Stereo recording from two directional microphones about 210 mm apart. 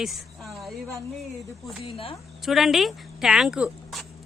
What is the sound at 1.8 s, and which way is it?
Speech, 25° left (ahead or behind).